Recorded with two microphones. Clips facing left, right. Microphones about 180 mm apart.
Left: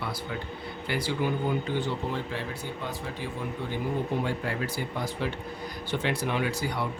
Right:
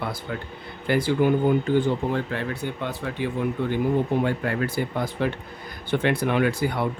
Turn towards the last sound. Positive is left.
turn(degrees=-55)  # may be behind; listen again after turning